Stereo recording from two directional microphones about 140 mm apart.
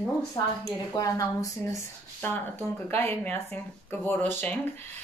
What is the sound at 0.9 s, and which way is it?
A woman's voice, 25° left (ahead or behind).